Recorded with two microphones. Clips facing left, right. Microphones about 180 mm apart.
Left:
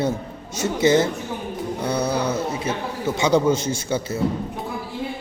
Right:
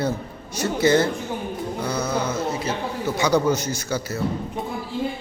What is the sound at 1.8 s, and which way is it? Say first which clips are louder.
Mantra: left 3 dB; 30° left (ahead or behind).